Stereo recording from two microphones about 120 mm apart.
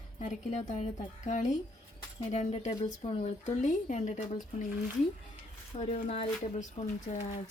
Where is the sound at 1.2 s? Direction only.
90° left.